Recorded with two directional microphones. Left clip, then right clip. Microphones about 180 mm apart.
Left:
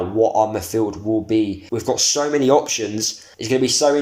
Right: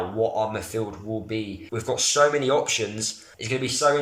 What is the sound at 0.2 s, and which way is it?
Speech, 35° left (ahead or behind).